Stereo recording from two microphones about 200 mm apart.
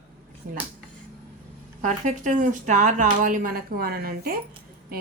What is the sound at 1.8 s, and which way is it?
A woman's voice, 40° right (ahead or behind).